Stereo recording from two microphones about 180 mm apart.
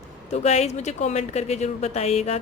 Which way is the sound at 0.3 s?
35° left (ahead or behind).